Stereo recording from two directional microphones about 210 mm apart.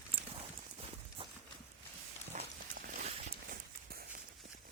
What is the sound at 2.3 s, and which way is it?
Horse, 35° right (ahead or behind).